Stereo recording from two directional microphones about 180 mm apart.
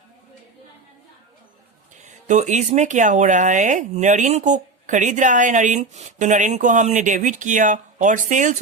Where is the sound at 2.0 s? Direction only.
40° right (ahead or behind).